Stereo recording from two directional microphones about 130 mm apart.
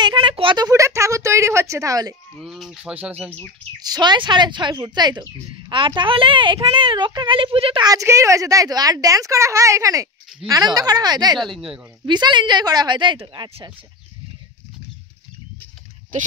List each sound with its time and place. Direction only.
0.0 s a sound: 40° right (ahead or behind)
0.7 s speech: 25° right (ahead or behind)
2.4 s speech: 5° right (ahead or behind)
3.8 s a woman's voice: 35° right (ahead or behind)
7.8 s a woman's voice: 25° right (ahead or behind)
11.3 s speech: centre (ahead or behind)
12.1 s a woman's voice: 35° right (ahead or behind)